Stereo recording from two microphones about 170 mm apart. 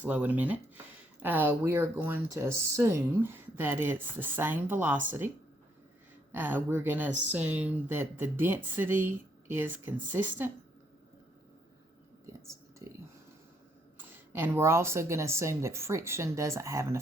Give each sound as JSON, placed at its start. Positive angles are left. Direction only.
{"t": 0.0, "sound": "speech", "side_deg": -10}
{"t": 14.3, "sound": "speech", "side_deg": -15}